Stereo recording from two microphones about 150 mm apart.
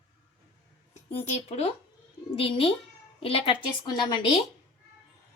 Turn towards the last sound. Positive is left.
turn(degrees=35)  # may be behind; listen again after turning